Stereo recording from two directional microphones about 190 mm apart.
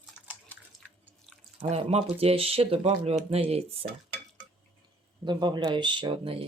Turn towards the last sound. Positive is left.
turn(degrees=-25)  # may be behind; listen again after turning